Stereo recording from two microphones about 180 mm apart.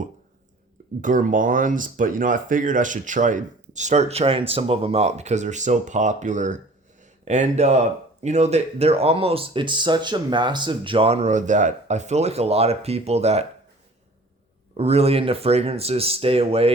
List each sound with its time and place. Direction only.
1.0 s speech: 45° right (ahead or behind)
14.8 s speech: 35° right (ahead or behind)